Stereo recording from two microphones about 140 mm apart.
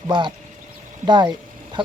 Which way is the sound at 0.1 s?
35° right (ahead or behind).